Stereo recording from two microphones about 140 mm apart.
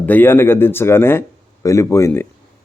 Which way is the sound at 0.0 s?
15° left (ahead or behind).